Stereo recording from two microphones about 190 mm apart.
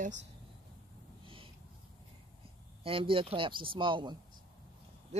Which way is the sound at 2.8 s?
30° right (ahead or behind).